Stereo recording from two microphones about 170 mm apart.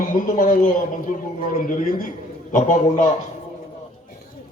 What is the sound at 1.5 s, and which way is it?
A man's voice, 50° left (ahead or behind).